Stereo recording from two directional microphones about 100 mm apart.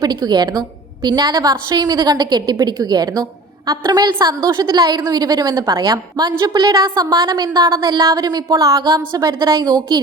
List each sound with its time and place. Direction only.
0.0 s a woman's voice: 45° right (ahead or behind)